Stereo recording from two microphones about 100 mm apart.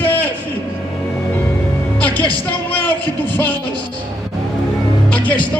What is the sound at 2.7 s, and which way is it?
Speech, 15° left (ahead or behind).